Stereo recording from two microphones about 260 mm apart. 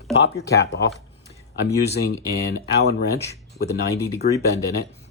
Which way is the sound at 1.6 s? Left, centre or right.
Left.